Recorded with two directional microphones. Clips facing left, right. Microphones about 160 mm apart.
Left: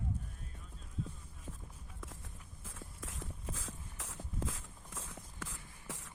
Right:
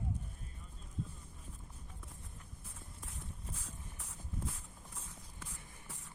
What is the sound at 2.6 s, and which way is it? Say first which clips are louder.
Walk: left 8 dB; 90° left.